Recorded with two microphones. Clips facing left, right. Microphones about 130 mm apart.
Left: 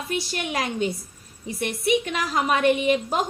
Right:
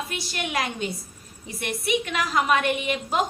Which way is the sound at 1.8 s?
40° left (ahead or behind).